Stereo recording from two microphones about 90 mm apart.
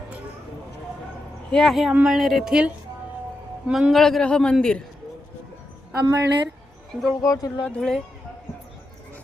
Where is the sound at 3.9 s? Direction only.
5° left (ahead or behind).